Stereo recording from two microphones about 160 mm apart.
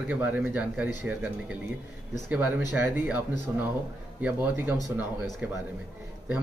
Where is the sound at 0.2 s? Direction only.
10° right (ahead or behind).